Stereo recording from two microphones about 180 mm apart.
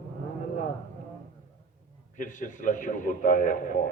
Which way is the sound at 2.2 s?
45° left (ahead or behind).